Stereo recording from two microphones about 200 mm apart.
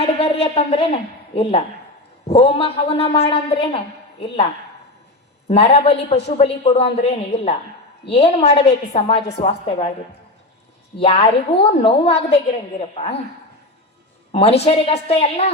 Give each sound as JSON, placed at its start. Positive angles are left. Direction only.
{"t": 0.0, "sound": "a woman's voice", "side_deg": 30}
{"t": 5.5, "sound": "a woman's voice", "side_deg": 30}
{"t": 10.9, "sound": "a woman's voice", "side_deg": 30}
{"t": 14.3, "sound": "a woman's voice", "side_deg": 30}